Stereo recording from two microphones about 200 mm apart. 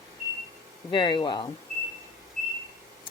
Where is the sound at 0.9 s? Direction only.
20° left (ahead or behind).